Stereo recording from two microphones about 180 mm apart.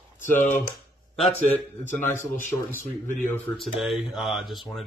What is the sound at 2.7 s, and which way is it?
Speech, 45° left (ahead or behind).